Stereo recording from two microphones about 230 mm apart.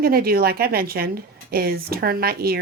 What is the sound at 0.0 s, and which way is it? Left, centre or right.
Speech, right.